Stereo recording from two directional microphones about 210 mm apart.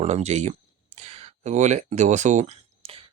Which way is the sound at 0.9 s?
30° right (ahead or behind).